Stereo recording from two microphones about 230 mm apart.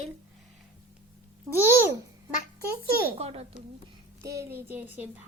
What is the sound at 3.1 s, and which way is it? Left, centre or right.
Speech, right.